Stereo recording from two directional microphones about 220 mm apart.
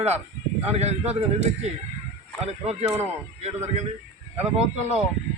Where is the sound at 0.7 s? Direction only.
30° right (ahead or behind).